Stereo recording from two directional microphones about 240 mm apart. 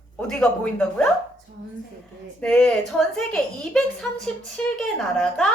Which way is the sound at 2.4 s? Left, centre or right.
Centre.